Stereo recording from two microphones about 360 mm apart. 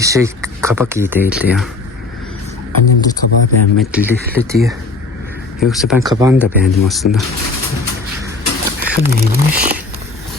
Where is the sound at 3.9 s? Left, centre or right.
Centre.